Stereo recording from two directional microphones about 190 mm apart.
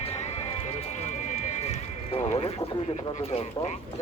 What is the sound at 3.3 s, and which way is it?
Speech, 30° left (ahead or behind).